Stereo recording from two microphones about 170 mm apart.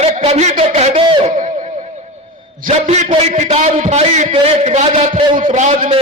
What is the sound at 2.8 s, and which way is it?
A man's voice, 40° right (ahead or behind).